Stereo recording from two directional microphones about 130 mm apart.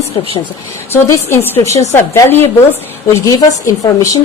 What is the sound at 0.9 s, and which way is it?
A woman's voice, 20° left (ahead or behind).